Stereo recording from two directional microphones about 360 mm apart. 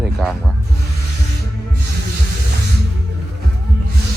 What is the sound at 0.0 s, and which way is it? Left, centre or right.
Snake, centre.